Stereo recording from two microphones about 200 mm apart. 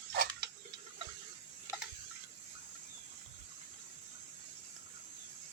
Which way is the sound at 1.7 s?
15° right (ahead or behind).